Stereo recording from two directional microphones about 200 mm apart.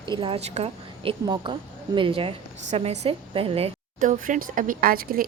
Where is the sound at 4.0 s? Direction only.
40° right (ahead or behind).